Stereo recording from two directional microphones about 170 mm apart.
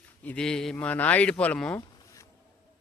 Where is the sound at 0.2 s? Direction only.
5° left (ahead or behind).